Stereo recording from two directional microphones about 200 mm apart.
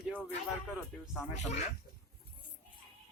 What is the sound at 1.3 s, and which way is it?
Speech, 35° left (ahead or behind).